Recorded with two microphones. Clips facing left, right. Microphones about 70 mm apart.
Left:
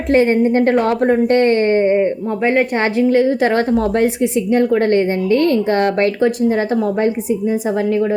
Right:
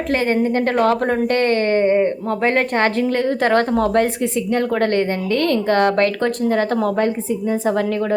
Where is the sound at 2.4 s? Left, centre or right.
Centre.